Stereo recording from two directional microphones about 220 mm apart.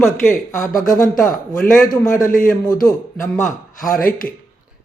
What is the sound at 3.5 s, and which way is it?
Speech, 40° left (ahead or behind).